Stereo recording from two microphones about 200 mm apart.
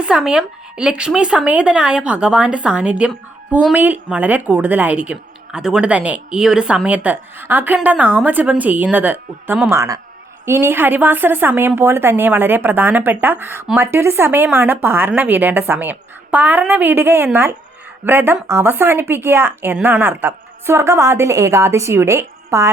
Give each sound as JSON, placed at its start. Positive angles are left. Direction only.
{"t": 0.0, "sound": "a woman's voice", "side_deg": -5}